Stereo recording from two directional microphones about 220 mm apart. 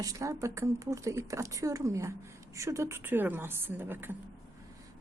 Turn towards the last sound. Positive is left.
turn(degrees=-10)  # may be behind; listen again after turning